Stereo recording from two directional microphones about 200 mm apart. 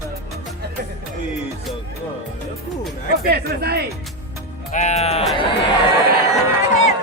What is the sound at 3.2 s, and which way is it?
Speech, 50° right (ahead or behind).